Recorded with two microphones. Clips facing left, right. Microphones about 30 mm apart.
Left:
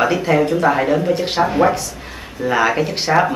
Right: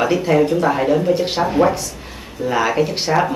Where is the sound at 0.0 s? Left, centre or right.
Centre.